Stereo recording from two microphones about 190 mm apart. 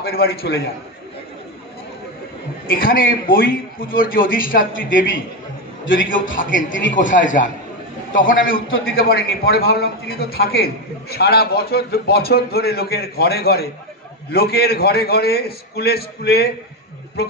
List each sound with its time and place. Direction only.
0.0 s a man's voice: 55° left (ahead or behind)
2.7 s a man's voice: 50° left (ahead or behind)
5.9 s a man's voice: 45° left (ahead or behind)
6.7 s speech: 75° left (ahead or behind)
7.0 s a man's voice: 45° left (ahead or behind)
8.6 s a man's voice: 90° left
8.9 s a man's voice: 50° left (ahead or behind)